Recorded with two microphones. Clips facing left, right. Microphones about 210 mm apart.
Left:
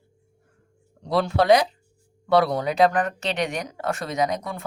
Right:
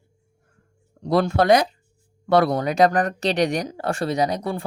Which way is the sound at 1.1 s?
45° right (ahead or behind).